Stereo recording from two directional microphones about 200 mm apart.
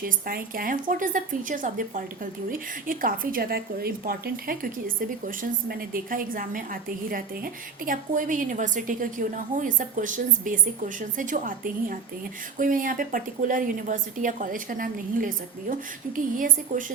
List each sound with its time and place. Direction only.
0.0 s a woman's voice: 45° right (ahead or behind)